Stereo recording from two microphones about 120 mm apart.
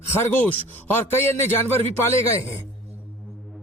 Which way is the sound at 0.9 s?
20° left (ahead or behind).